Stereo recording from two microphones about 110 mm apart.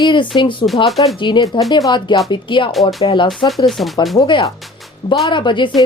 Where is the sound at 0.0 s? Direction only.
45° left (ahead or behind).